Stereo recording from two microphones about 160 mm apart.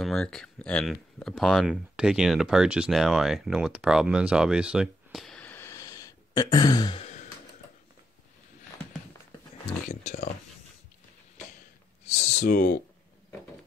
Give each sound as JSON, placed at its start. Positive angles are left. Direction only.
{"t": 0.0, "sound": "speech", "side_deg": 5}
{"t": 12.1, "sound": "speech", "side_deg": 45}
{"t": 12.4, "sound": "speech", "side_deg": 55}